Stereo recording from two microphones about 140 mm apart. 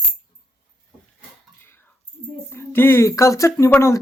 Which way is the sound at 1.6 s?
15° left (ahead or behind).